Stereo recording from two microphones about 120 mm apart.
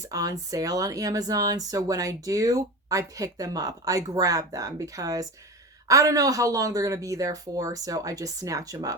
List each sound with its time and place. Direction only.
0.0 s speech: 30° right (ahead or behind)